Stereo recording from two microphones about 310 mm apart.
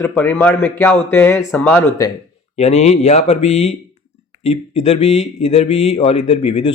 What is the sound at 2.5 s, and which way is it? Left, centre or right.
A man's voice, left.